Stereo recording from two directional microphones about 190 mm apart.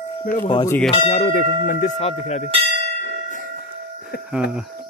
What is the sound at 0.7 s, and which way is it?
Speech, 5° left (ahead or behind).